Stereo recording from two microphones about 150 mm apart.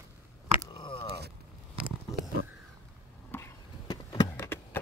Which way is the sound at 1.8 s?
5° right (ahead or behind).